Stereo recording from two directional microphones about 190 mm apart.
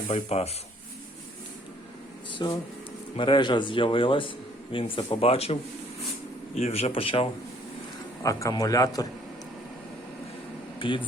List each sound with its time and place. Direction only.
0.1 s speech: 35° left (ahead or behind)
2.3 s a man's voice: 25° left (ahead or behind)
8.2 s a man's voice: 15° left (ahead or behind)
10.8 s speech: 25° left (ahead or behind)